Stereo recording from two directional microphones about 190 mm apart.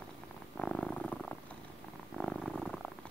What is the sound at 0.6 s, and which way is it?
Purr, 5° left (ahead or behind).